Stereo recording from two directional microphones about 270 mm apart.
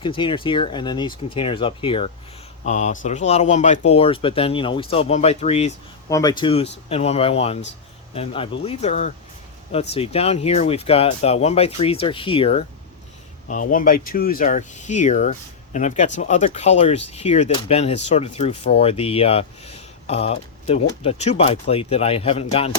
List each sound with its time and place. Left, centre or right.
0.0 s speech: centre
6.1 s speech: centre